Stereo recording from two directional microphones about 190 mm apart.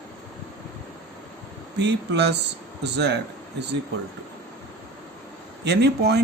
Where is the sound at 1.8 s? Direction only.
65° right (ahead or behind).